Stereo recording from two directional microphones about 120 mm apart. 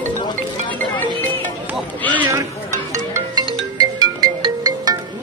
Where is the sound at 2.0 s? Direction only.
15° left (ahead or behind).